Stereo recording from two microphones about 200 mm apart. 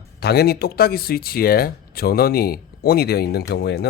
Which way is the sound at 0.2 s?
55° left (ahead or behind).